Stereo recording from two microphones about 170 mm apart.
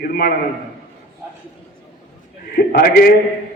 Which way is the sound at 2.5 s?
65° left (ahead or behind).